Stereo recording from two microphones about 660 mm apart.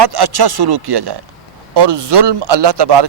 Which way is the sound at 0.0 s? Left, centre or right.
Right.